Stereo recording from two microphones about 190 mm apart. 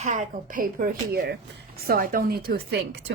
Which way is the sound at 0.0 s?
40° right (ahead or behind).